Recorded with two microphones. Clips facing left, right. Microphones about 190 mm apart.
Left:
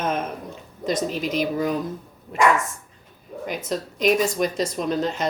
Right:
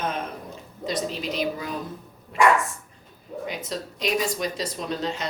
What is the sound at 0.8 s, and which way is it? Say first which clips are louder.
Speech: left 4 dB; 45° left (ahead or behind).